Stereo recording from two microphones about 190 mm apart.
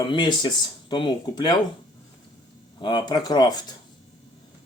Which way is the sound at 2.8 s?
25° left (ahead or behind).